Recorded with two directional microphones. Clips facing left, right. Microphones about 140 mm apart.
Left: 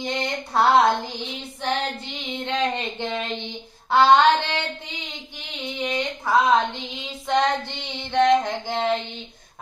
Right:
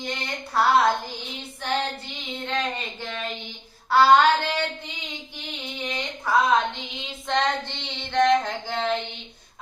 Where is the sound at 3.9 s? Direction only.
20° left (ahead or behind).